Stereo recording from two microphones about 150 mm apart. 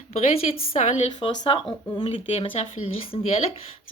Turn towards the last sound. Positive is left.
turn(degrees=40)  # may be behind; listen again after turning